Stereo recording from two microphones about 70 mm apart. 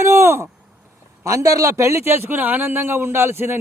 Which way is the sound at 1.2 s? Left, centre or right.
Right.